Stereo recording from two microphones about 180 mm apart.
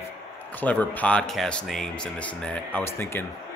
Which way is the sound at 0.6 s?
10° left (ahead or behind).